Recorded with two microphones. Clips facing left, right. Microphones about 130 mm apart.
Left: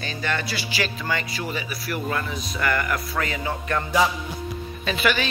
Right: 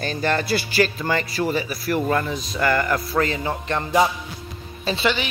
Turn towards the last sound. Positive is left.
turn(degrees=-25)  # may be behind; listen again after turning